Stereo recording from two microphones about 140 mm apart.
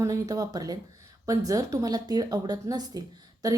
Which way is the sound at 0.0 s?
25° right (ahead or behind).